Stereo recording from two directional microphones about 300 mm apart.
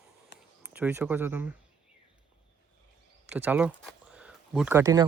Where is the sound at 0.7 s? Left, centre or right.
Centre.